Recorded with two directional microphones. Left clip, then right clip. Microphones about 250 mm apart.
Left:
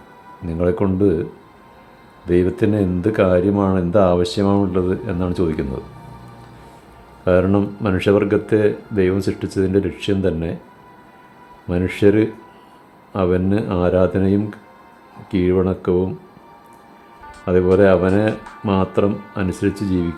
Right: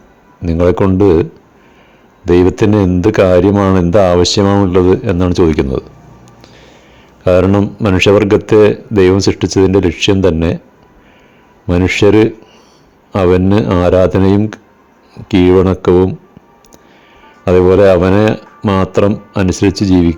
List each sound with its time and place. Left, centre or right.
0.4 s speech: right
2.2 s speech: right
7.3 s speech: right
11.7 s speech: right
17.4 s speech: right